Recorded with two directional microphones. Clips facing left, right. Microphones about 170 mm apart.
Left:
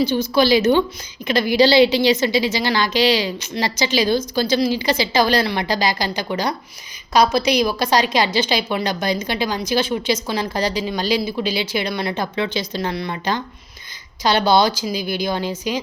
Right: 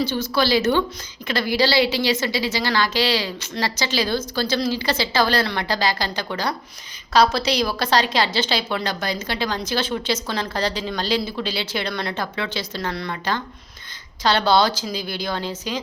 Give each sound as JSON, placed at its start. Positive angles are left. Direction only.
{"t": 0.0, "sound": "a woman's voice", "side_deg": 15}